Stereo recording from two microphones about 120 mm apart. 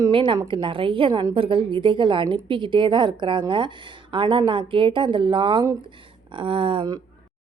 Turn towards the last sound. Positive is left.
turn(degrees=-40)  # may be behind; listen again after turning